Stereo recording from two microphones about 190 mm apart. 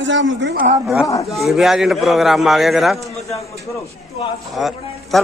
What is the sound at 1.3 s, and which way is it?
A man's voice, centre (ahead or behind).